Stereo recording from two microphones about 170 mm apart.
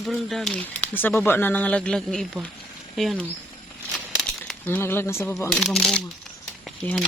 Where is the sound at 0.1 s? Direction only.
Centre (ahead or behind).